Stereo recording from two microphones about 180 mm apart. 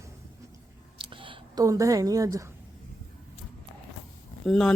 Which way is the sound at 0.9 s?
30° right (ahead or behind).